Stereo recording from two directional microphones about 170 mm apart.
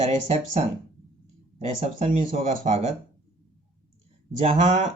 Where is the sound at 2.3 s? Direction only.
40° right (ahead or behind).